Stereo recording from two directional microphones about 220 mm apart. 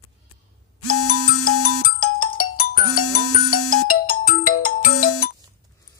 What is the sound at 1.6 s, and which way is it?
Ringtone, 40° left (ahead or behind).